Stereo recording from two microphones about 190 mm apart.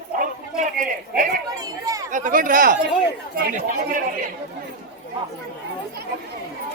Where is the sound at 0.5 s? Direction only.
40° right (ahead or behind).